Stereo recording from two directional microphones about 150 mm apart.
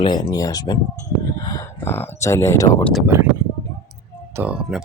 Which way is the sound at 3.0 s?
15° right (ahead or behind).